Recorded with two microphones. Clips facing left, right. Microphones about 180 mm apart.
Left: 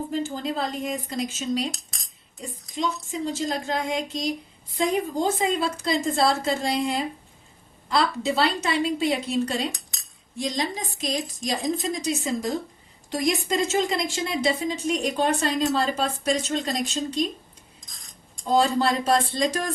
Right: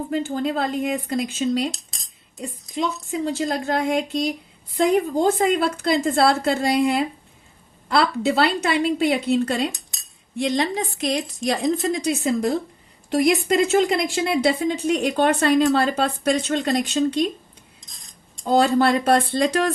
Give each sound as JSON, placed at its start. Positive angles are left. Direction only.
{"t": 0.1, "sound": "speech", "side_deg": -60}
{"t": 2.7, "sound": "speech", "side_deg": -60}
{"t": 18.5, "sound": "speech", "side_deg": -60}